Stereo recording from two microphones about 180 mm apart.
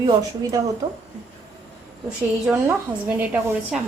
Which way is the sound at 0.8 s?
20° right (ahead or behind).